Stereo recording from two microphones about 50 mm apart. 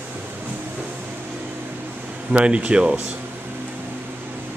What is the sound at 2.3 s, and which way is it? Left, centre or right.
Speech, right.